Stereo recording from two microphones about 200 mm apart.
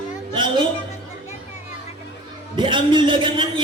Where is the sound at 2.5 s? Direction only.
25° right (ahead or behind).